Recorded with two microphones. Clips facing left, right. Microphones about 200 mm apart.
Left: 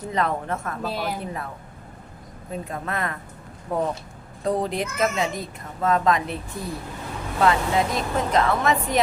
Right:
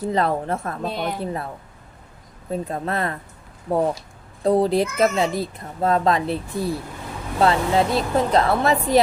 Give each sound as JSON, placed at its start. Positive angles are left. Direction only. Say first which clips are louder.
{"t": 0.0, "sound": "a child's voice", "louder": "right 4 dB", "side_deg": -35}
{"t": 0.9, "sound": "a woman's voice", "louder": "right 1 dB", "side_deg": 0}
{"t": 1.2, "sound": "a child's voice", "louder": "right 5 dB", "side_deg": -35}
{"t": 2.5, "sound": "a child's voice", "louder": "right 5 dB", "side_deg": -30}